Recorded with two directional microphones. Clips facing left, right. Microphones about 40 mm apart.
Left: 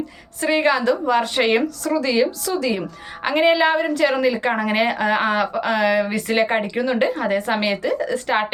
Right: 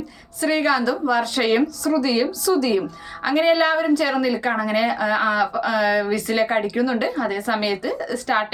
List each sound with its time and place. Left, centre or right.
0.4 s a woman's voice: left